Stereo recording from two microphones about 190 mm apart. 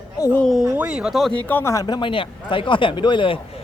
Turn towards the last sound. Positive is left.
turn(degrees=25)  # may be behind; listen again after turning